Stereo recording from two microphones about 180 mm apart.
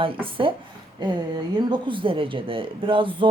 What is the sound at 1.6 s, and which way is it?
A woman's voice, 25° right (ahead or behind).